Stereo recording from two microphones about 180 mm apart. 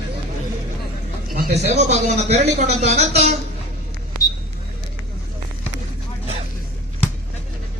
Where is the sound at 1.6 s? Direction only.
35° right (ahead or behind).